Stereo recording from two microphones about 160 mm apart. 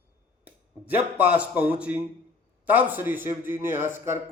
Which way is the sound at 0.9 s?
10° right (ahead or behind).